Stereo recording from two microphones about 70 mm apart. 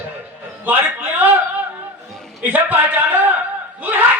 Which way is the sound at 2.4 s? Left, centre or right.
Right.